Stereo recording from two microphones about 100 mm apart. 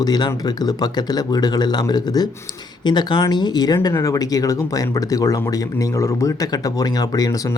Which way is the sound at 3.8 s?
35° left (ahead or behind).